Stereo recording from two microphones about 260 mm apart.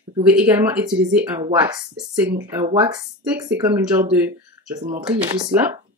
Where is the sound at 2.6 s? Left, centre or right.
Centre.